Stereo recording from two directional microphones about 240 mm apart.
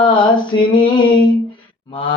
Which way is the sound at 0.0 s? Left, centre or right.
Centre.